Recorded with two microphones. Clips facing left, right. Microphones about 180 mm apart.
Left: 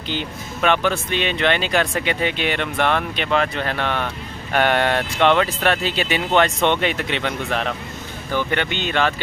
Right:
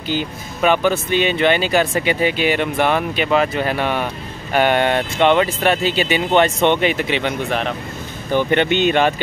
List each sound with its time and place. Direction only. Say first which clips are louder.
0.1 s speech: right 4 dB; 5° right (ahead or behind)
8.3 s speech: right 6 dB; 20° right (ahead or behind)